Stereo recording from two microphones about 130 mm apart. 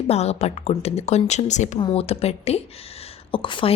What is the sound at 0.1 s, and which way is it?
A woman's voice, 55° left (ahead or behind).